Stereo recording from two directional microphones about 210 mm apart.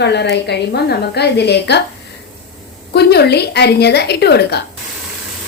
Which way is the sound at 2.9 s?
50° left (ahead or behind).